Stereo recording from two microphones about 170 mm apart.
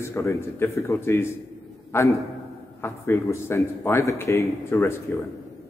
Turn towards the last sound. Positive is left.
turn(degrees=15)  # may be behind; listen again after turning